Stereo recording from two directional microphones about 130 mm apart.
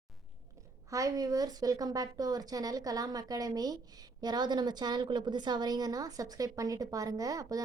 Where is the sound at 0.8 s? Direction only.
25° right (ahead or behind).